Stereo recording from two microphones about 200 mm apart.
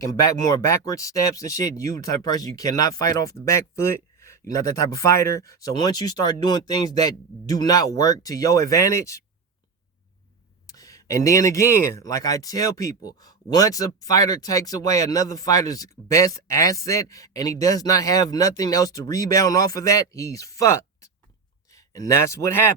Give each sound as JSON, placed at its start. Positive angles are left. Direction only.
{"t": 0.3, "sound": "speech", "side_deg": 15}
{"t": 10.7, "sound": "speech", "side_deg": 15}